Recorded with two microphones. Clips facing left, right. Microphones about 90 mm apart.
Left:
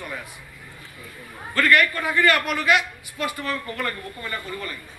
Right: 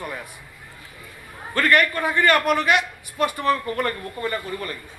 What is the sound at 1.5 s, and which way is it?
A woman's voice, 35° right (ahead or behind).